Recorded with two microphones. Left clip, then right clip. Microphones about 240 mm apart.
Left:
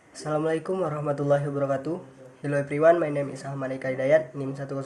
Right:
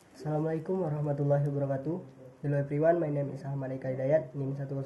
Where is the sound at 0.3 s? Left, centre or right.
Left.